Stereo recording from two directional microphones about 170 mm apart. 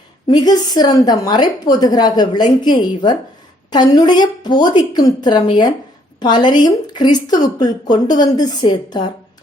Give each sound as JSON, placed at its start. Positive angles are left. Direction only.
{"t": 0.3, "sound": "a woman's voice", "side_deg": 25}